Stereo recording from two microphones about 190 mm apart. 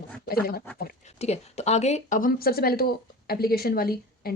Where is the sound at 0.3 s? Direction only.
55° left (ahead or behind).